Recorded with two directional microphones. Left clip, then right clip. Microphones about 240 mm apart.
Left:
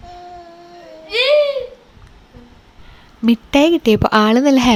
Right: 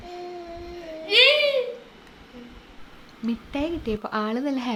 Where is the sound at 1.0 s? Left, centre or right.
Left.